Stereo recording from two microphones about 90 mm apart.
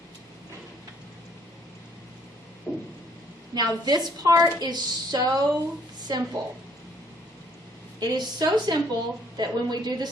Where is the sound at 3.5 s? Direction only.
50° right (ahead or behind).